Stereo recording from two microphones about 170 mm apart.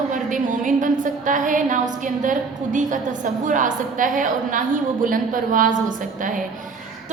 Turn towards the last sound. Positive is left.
turn(degrees=-55)  # may be behind; listen again after turning